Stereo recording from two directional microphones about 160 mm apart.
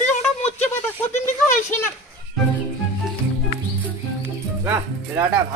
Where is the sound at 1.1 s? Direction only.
45° left (ahead or behind).